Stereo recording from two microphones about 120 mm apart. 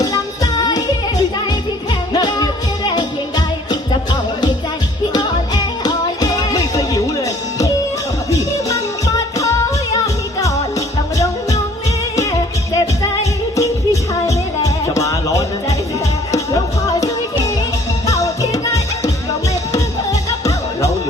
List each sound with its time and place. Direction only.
0.0 s music: 30° left (ahead or behind)
2.1 s music: 35° left (ahead or behind)
10.4 s music: 25° left (ahead or behind)
13.6 s music: 25° left (ahead or behind)
18.0 s music: 30° left (ahead or behind)